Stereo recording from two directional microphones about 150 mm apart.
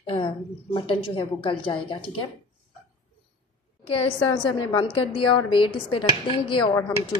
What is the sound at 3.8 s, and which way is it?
A woman's voice, 40° left (ahead or behind).